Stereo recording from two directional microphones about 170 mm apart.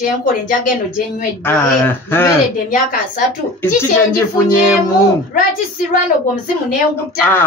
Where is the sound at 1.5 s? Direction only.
15° left (ahead or behind).